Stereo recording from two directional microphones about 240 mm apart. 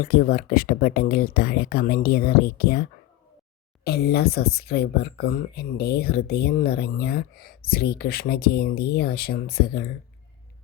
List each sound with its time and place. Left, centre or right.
0.0 s speech: left
3.8 s speech: left